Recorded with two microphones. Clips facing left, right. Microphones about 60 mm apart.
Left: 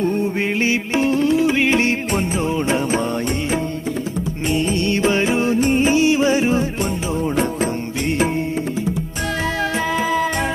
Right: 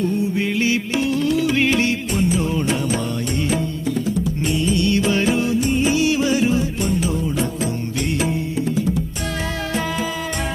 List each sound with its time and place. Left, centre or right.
0.0 s music: left
4.4 s music: left
7.2 s music: left
9.7 s music: left